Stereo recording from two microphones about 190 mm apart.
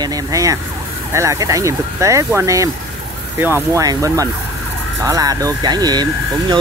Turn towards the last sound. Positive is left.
turn(degrees=-20)  # may be behind; listen again after turning